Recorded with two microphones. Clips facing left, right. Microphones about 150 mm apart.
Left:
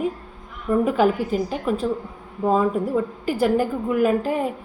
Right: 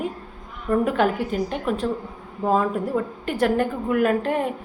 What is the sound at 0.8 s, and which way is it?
A woman's voice, centre (ahead or behind).